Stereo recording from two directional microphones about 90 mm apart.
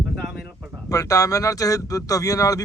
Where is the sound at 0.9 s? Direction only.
40° left (ahead or behind).